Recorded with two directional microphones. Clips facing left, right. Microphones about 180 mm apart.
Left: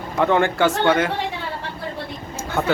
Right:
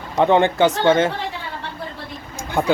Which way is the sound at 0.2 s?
20° right (ahead or behind).